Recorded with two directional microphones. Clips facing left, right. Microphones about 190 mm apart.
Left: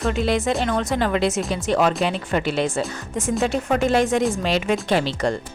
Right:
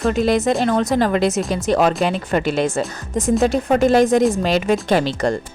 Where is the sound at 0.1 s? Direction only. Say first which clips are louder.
Right 4 dB; 40° right (ahead or behind).